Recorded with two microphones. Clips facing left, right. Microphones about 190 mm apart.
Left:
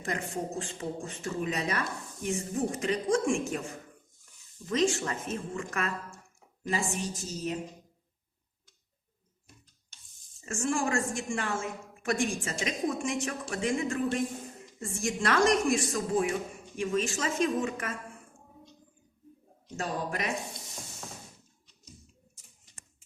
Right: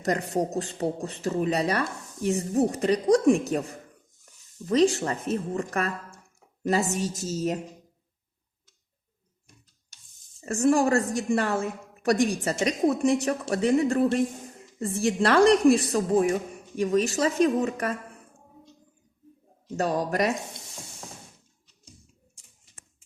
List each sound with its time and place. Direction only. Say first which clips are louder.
0.0 s a woman's voice: right 8 dB; 40° right (ahead or behind)
4.7 s a woman's voice: right 6 dB; 35° right (ahead or behind)
10.4 s a woman's voice: right 9 dB; 40° right (ahead or behind)
19.7 s a woman's voice: right 8 dB; 40° right (ahead or behind)